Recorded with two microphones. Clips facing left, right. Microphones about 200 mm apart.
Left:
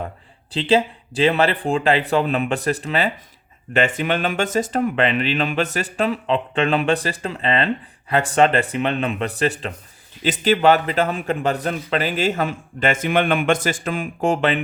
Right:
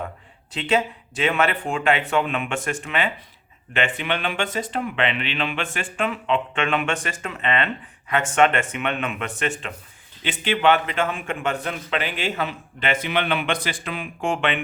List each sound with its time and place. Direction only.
0.5 s a man's voice: 30° left (ahead or behind)